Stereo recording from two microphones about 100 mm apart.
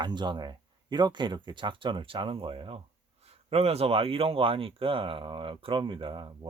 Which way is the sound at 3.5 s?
90° right.